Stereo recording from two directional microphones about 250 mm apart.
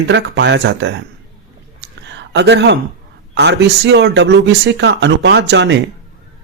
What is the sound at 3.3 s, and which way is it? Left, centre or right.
Speech, right.